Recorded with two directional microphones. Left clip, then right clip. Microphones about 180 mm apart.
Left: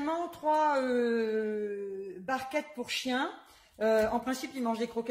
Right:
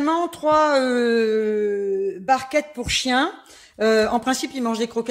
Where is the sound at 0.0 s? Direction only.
45° right (ahead or behind).